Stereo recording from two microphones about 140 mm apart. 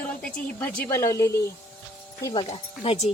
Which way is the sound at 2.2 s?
35° left (ahead or behind).